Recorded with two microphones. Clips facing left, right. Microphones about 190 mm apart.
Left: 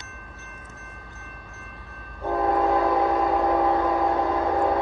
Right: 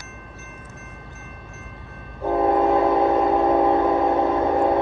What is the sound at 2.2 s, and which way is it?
Train, 25° right (ahead or behind).